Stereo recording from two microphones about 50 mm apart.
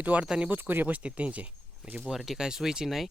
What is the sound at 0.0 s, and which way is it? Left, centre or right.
Speech, right.